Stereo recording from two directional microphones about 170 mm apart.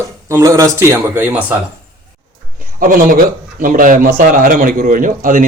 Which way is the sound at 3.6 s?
55° right (ahead or behind).